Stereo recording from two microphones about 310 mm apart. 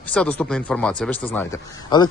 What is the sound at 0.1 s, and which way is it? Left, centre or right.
Speech, centre.